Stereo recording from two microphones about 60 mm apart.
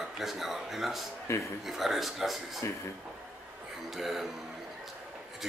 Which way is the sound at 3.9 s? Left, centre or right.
Centre.